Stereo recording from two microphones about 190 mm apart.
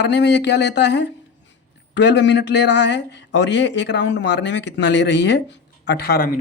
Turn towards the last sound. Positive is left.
turn(degrees=55)  # may be behind; listen again after turning